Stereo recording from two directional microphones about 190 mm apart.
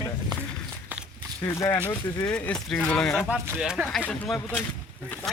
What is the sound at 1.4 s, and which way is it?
Speech, 15° left (ahead or behind).